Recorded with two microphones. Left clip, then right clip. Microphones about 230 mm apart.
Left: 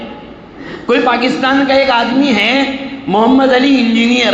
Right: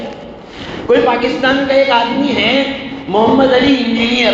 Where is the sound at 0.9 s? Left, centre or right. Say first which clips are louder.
Even; left.